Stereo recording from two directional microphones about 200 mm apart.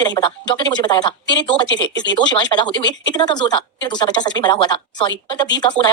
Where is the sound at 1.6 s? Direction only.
65° left (ahead or behind).